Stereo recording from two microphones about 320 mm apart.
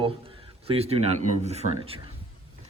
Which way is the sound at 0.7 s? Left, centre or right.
Centre.